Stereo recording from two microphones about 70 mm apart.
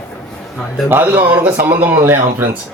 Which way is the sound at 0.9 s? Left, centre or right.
Right.